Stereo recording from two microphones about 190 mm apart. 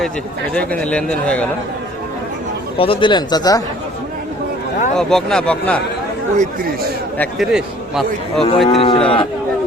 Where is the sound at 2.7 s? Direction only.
30° left (ahead or behind).